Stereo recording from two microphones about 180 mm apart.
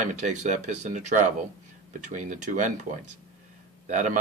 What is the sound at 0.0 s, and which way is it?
Speech, 40° right (ahead or behind).